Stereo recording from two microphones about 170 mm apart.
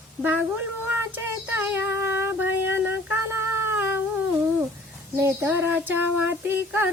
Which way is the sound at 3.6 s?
10° right (ahead or behind).